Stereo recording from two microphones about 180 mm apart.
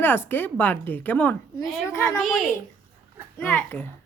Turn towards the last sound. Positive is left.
turn(degrees=10)  # may be behind; listen again after turning